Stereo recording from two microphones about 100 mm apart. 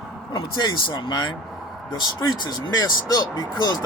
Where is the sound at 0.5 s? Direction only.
55° left (ahead or behind).